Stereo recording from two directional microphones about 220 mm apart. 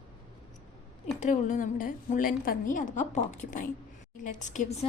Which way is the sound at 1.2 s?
35° left (ahead or behind).